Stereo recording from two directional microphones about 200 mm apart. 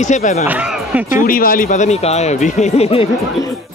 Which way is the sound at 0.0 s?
40° left (ahead or behind).